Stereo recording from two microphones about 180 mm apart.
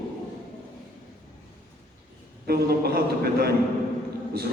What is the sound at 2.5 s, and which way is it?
A man's voice, 60° right (ahead or behind).